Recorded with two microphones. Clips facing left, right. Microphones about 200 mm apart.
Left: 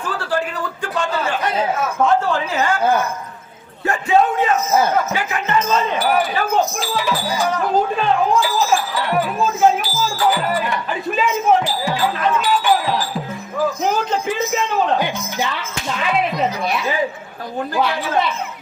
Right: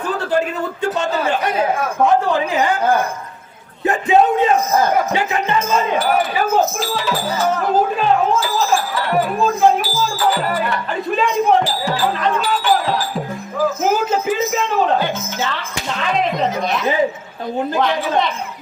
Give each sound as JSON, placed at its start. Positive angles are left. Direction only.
{"t": 0.8, "sound": "a man's voice", "side_deg": -20}
{"t": 5.5, "sound": "speech", "side_deg": -10}
{"t": 6.9, "sound": "speech", "side_deg": 10}
{"t": 7.9, "sound": "speech", "side_deg": -5}
{"t": 9.4, "sound": "speech", "side_deg": 0}
{"t": 11.1, "sound": "speech", "side_deg": 5}
{"t": 13.8, "sound": "speech", "side_deg": -5}
{"t": 14.9, "sound": "speech", "side_deg": 15}
{"t": 17.7, "sound": "speech", "side_deg": 5}